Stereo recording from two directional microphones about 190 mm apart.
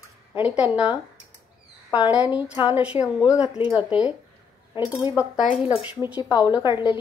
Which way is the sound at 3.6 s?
25° left (ahead or behind).